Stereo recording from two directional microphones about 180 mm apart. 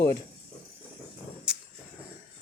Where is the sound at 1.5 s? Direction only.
5° right (ahead or behind).